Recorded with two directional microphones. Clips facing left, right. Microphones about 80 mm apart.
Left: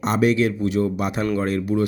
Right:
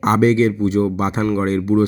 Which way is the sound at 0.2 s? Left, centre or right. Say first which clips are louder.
Right 4 dB; right.